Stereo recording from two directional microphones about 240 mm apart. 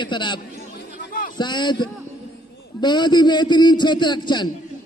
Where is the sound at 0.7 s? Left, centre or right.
Left.